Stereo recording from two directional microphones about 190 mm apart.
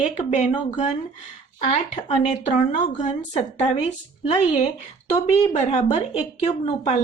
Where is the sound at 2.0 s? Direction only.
35° left (ahead or behind).